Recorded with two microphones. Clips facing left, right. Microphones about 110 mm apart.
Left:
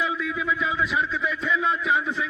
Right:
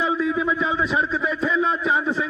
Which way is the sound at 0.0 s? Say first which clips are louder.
Right 5 dB; 30° right (ahead or behind).